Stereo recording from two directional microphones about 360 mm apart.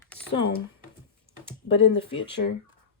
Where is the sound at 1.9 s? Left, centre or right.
Left.